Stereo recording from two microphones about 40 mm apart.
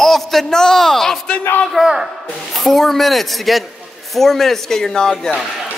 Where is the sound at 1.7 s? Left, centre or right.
Centre.